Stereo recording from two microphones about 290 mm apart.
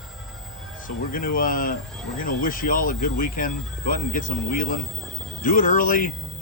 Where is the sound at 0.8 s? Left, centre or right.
Left.